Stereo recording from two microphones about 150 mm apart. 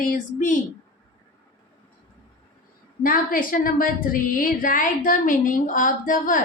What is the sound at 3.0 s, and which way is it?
A woman's voice, 70° left (ahead or behind).